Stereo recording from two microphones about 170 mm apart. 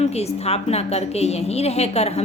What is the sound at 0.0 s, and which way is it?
A woman's voice, 40° left (ahead or behind).